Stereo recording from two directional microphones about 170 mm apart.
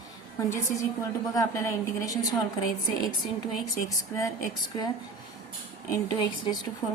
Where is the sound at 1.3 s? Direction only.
15° left (ahead or behind).